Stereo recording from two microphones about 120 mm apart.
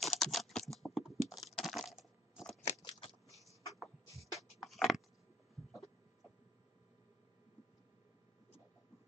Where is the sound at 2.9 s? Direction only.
45° left (ahead or behind).